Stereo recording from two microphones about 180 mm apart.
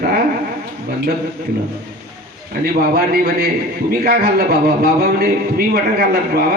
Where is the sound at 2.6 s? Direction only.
60° right (ahead or behind).